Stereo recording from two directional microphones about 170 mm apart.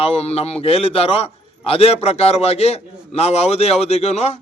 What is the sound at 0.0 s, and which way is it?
A man's voice, 35° left (ahead or behind).